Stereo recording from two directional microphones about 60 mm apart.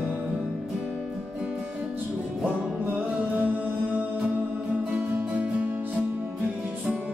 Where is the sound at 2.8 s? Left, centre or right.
Right.